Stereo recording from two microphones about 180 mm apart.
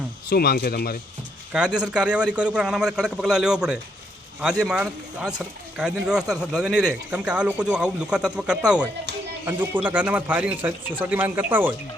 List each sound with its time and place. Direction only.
0.3 s speech: 60° left (ahead or behind)
1.5 s speech: 5° right (ahead or behind)